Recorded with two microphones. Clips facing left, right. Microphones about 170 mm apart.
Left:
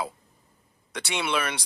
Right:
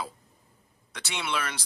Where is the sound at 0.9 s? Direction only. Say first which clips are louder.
Left 5 dB; 60° left (ahead or behind).